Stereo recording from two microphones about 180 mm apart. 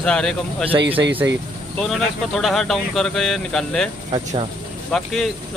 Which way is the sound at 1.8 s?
Centre (ahead or behind).